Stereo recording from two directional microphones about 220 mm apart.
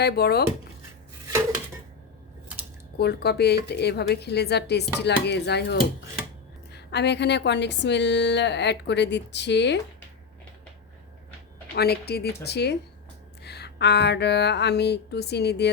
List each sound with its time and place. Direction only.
0.0 s a woman's voice: 45° left (ahead or behind)
3.0 s a woman's voice: 45° left (ahead or behind)
6.7 s a woman's voice: 50° left (ahead or behind)
11.7 s a woman's voice: 45° left (ahead or behind)